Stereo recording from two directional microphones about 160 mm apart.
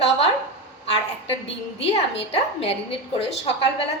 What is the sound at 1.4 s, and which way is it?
A woman's voice, 35° left (ahead or behind).